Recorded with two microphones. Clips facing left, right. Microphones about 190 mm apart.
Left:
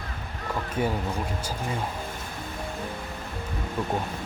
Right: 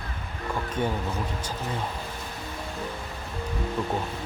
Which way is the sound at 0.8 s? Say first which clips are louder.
Left 1 dB; 10° left (ahead or behind).